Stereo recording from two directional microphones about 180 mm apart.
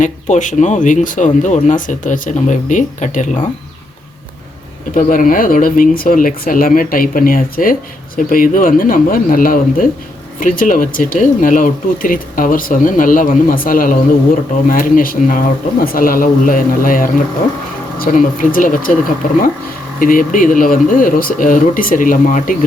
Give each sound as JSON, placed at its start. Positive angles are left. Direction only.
{"t": 0.0, "sound": "speech", "side_deg": 45}
{"t": 4.9, "sound": "speech", "side_deg": 50}